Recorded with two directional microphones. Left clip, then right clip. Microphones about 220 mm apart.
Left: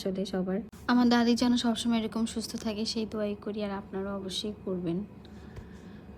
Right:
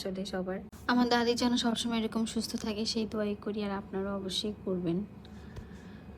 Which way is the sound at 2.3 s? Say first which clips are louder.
Even; 25° left (ahead or behind).